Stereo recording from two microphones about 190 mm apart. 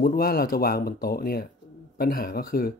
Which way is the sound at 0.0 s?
50° left (ahead or behind).